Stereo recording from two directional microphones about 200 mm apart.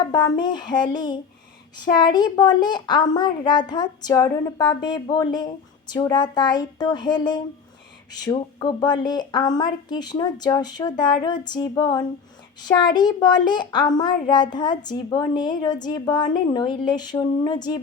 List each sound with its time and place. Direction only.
0.0 s a child's voice: 20° left (ahead or behind)